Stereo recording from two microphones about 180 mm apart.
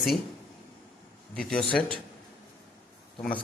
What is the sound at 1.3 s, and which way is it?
Speech, 5° left (ahead or behind).